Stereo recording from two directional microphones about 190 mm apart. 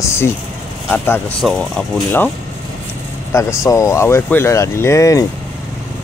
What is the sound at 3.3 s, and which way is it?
Speech, 15° left (ahead or behind).